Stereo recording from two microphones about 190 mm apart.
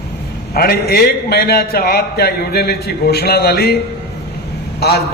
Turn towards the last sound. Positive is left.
turn(degrees=60)  # may be behind; listen again after turning